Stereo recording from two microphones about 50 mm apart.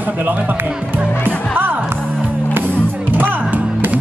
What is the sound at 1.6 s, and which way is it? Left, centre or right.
Music, right.